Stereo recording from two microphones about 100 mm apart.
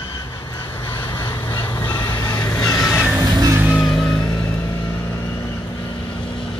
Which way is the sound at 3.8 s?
5° left (ahead or behind).